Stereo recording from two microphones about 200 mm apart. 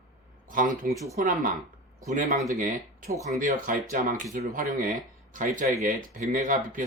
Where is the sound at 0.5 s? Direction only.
40° right (ahead or behind).